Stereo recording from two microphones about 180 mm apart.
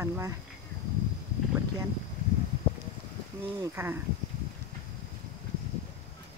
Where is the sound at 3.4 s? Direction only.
15° right (ahead or behind).